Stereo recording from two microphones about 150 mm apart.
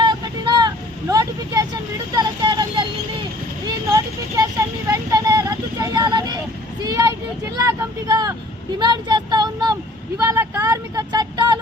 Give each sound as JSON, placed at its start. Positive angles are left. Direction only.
{"t": 0.0, "sound": "vehicle", "side_deg": -30}
{"t": 4.9, "sound": "a sound", "side_deg": -25}
{"t": 6.8, "sound": "vehicle", "side_deg": -25}
{"t": 8.8, "sound": "child singing", "side_deg": -30}
{"t": 10.2, "sound": "vehicle", "side_deg": -15}